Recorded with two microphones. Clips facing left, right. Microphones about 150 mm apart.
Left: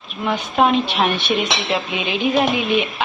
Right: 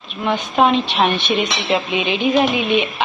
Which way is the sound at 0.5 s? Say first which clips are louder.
Right 1 dB; 5° left (ahead or behind).